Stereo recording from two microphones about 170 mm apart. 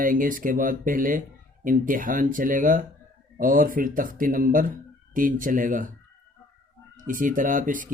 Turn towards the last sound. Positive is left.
turn(degrees=-50)  # may be behind; listen again after turning